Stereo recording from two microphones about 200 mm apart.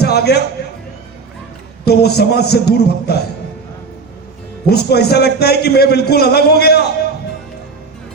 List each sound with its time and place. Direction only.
0.0 s a man's voice: 55° left (ahead or behind)
1.8 s a man's voice: 55° left (ahead or behind)
4.7 s a man's voice: 55° left (ahead or behind)